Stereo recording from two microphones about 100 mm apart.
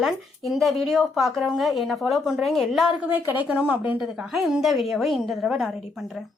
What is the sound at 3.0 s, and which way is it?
Speech, 20° right (ahead or behind).